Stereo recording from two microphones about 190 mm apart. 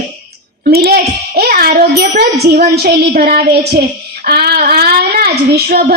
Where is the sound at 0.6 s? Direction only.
55° right (ahead or behind).